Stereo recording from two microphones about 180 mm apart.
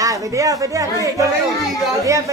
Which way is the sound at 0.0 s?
20° right (ahead or behind).